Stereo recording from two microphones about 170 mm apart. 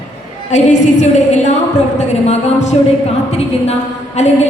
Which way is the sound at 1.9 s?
40° left (ahead or behind).